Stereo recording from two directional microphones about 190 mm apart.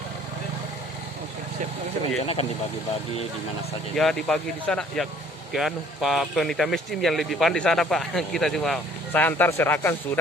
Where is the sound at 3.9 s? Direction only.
5° left (ahead or behind).